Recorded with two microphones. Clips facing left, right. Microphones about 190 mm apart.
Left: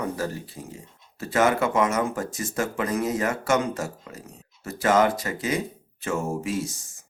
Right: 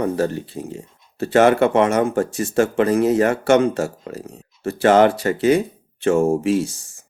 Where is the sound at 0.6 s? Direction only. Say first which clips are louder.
Right 9 dB; 50° right (ahead or behind).